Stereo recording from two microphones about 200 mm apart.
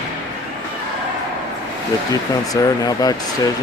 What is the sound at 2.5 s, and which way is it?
Speech, 20° left (ahead or behind).